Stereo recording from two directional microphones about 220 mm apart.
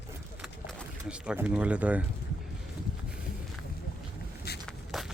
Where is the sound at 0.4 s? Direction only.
5° right (ahead or behind).